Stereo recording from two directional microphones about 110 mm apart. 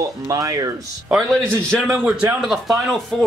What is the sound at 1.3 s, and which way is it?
Speech, 10° left (ahead or behind).